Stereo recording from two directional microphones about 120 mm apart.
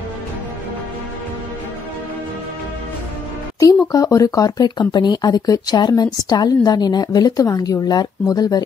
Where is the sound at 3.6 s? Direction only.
25° left (ahead or behind).